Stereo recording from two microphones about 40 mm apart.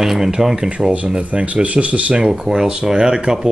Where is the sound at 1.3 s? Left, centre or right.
Right.